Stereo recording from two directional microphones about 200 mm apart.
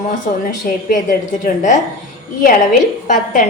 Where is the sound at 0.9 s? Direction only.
40° left (ahead or behind).